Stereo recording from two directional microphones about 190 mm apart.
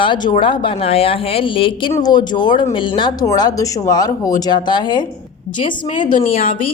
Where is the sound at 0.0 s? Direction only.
25° left (ahead or behind).